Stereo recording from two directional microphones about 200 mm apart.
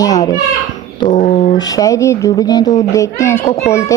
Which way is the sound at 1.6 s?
15° left (ahead or behind).